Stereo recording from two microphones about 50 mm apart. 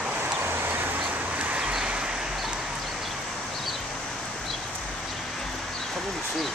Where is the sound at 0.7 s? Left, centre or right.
Right.